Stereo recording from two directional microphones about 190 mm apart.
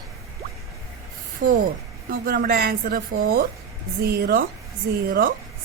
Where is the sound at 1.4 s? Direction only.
45° right (ahead or behind).